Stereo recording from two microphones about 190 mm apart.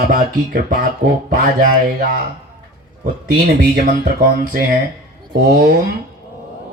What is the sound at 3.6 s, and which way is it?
Speech, 50° right (ahead or behind).